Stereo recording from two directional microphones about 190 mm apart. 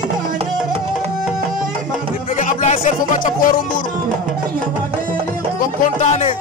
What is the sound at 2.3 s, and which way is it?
Speech, 40° left (ahead or behind).